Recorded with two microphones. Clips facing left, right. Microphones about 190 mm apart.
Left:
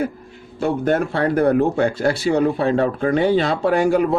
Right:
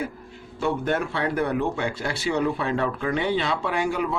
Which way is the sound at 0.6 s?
40° left (ahead or behind).